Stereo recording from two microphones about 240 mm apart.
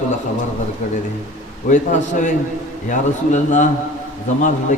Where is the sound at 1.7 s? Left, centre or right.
Left.